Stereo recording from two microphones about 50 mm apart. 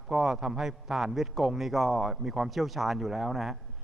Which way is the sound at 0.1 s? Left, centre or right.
Centre.